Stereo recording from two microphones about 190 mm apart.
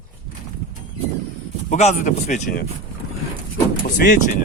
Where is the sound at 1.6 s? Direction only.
40° left (ahead or behind).